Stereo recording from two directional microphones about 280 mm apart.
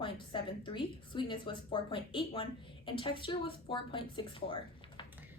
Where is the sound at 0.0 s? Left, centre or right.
Centre.